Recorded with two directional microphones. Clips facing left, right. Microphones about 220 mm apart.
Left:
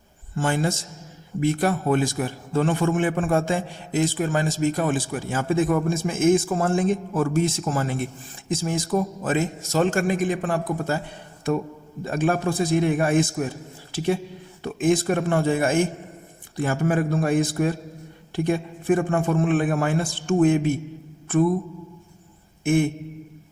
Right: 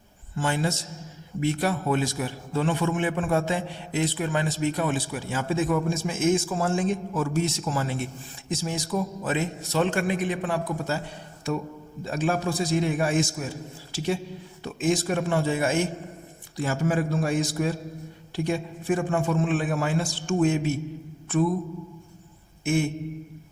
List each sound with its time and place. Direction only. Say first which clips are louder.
0.3 s a man's voice: left 3 dB; 50° left (ahead or behind)
12.0 s a man's voice: left 3 dB; 55° left (ahead or behind)
22.6 s a sound: left 4 dB; 55° left (ahead or behind)